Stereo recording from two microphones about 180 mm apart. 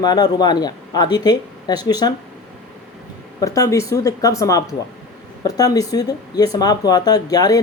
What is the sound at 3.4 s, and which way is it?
Speech, 20° left (ahead or behind).